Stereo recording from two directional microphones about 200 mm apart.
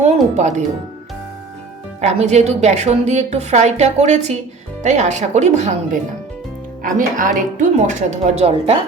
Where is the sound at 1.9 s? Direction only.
35° right (ahead or behind).